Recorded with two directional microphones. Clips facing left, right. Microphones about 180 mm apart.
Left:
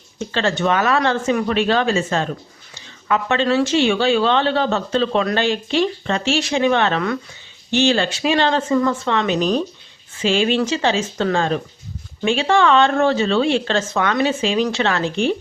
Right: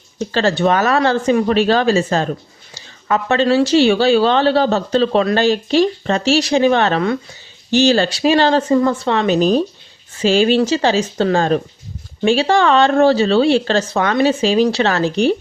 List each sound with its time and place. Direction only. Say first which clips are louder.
0.2 s speech: right 4 dB; 35° right (ahead or behind)